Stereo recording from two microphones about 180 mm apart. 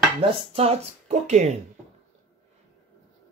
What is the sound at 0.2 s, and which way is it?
Speech, 35° right (ahead or behind).